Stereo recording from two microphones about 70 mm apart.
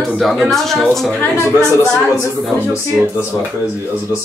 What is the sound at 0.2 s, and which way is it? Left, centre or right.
Speech, centre.